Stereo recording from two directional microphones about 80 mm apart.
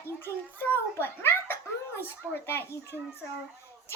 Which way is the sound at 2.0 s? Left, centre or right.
Left.